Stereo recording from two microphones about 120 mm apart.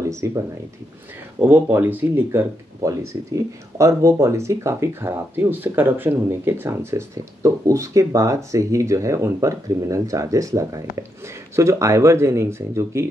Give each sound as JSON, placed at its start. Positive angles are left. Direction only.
{"t": 0.1, "sound": "speech", "side_deg": -25}
{"t": 1.4, "sound": "speech", "side_deg": -15}